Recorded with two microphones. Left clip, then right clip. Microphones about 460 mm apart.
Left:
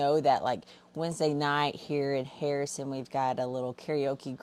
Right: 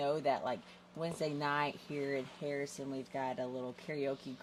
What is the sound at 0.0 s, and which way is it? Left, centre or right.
Speech, left.